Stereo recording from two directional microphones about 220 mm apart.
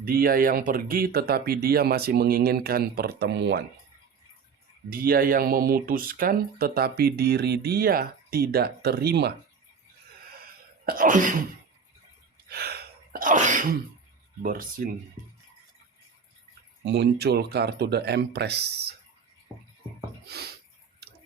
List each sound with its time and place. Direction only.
0.0 s speech: 40° right (ahead or behind)
4.9 s speech: 40° right (ahead or behind)
10.4 s sneeze: 40° right (ahead or behind)
12.5 s sneeze: 45° right (ahead or behind)
14.4 s speech: 40° right (ahead or behind)
16.8 s speech: 50° right (ahead or behind)
20.2 s a sound: 45° right (ahead or behind)